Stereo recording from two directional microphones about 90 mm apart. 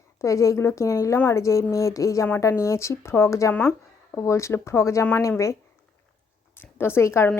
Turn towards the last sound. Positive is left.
turn(degrees=30)  # may be behind; listen again after turning